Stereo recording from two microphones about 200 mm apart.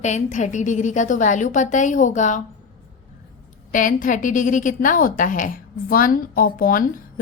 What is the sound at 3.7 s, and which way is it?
A woman's voice, 40° left (ahead or behind).